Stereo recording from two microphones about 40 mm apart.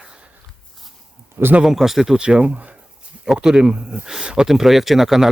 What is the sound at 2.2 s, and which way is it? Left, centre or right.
Speech, right.